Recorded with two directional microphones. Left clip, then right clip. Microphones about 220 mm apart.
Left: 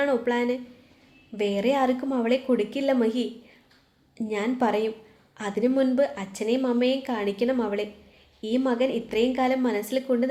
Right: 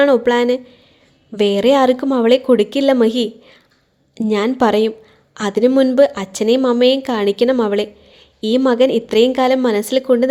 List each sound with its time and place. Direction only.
0.0 s speech: 40° right (ahead or behind)